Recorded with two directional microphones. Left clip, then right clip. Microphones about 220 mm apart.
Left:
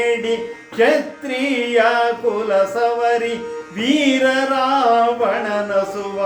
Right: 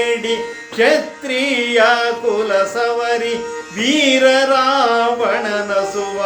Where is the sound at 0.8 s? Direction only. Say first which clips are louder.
Right 1 dB; 10° right (ahead or behind).